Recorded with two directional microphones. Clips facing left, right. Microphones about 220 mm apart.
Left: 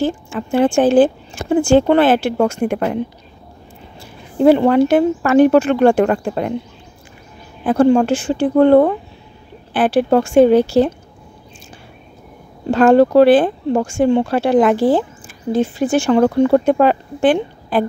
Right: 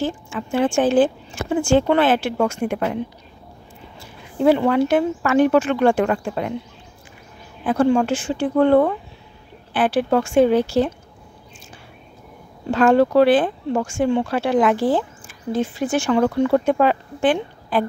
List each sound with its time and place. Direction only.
0.0 s speech: 35° left (ahead or behind)
2.6 s speech: 50° left (ahead or behind)
4.4 s speech: 35° left (ahead or behind)
7.6 s speech: 35° left (ahead or behind)
12.7 s speech: 35° left (ahead or behind)